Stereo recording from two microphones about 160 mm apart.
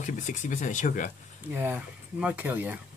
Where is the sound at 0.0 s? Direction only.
55° left (ahead or behind).